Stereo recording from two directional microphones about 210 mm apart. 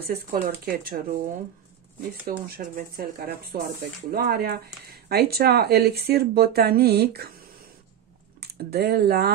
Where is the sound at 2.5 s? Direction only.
45° right (ahead or behind).